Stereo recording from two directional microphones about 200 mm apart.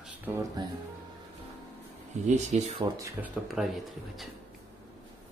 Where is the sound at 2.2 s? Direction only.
35° right (ahead or behind).